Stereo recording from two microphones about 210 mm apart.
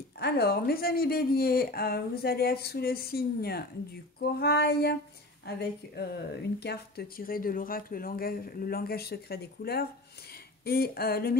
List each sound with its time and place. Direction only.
0.2 s speech: 45° left (ahead or behind)